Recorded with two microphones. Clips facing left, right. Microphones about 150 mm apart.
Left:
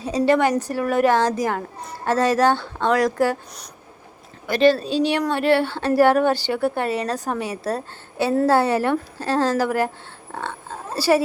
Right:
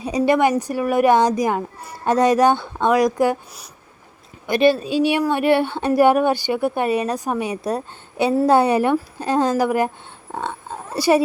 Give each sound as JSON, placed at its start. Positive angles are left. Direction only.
{"t": 0.0, "sound": "a child's voice", "side_deg": -15}
{"t": 10.3, "sound": "oink", "side_deg": -15}